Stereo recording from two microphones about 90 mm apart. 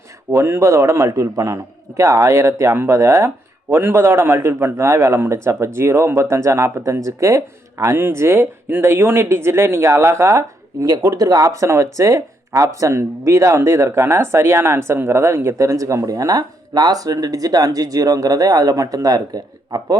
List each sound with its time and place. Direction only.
0.3 s a man's voice: 30° right (ahead or behind)
10.8 s a man's voice: 40° right (ahead or behind)
16.4 s speech: 50° right (ahead or behind)